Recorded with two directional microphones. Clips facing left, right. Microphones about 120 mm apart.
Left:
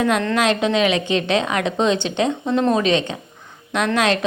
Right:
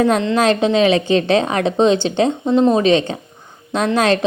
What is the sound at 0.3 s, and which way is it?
A woman's voice, 35° right (ahead or behind).